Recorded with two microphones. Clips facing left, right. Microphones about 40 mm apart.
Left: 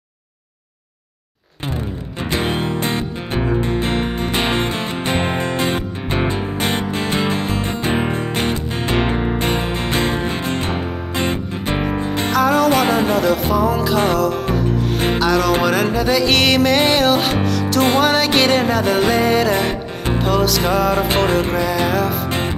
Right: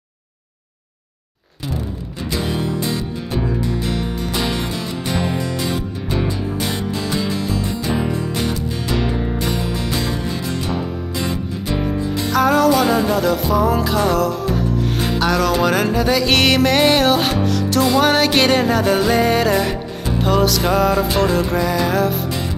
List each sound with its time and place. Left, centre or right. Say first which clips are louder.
2.3 s music: left 2 dB; left
12.4 s music: right 1 dB; centre
12.6 s music: even; left
13.1 s music: left 1 dB; centre